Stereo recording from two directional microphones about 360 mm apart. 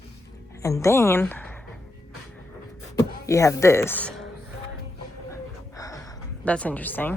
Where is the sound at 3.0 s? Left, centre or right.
Centre.